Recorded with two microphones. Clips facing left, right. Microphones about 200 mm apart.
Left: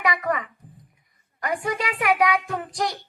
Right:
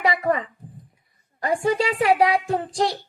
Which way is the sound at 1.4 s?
30° right (ahead or behind).